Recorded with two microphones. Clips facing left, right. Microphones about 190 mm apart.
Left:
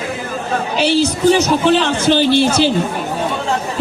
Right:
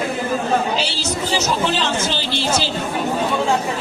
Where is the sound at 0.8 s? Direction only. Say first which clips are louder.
Left 11 dB; 55° left (ahead or behind).